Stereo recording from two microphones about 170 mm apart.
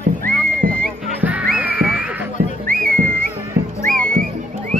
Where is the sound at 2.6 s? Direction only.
55° right (ahead or behind).